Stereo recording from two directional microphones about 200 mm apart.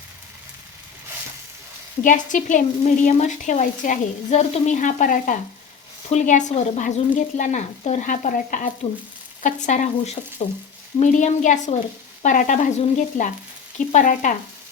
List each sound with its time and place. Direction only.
2.0 s a woman's voice: 40° left (ahead or behind)